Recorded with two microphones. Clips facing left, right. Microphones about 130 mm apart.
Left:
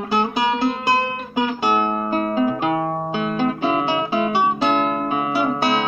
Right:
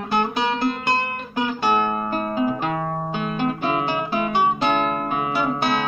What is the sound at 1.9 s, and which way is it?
Music, 5° left (ahead or behind).